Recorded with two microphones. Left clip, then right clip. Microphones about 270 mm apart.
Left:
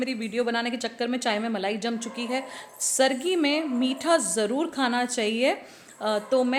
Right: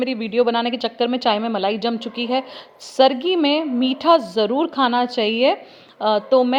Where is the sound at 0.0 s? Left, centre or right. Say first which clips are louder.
Right 9 dB; centre.